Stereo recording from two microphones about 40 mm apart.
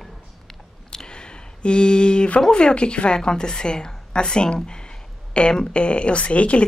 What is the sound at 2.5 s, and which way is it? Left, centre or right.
A woman's voice, left.